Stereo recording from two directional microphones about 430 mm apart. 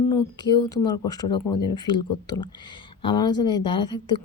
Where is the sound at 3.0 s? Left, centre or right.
Centre.